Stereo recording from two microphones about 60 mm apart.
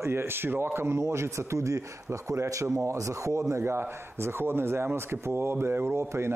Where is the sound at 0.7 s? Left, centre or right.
Right.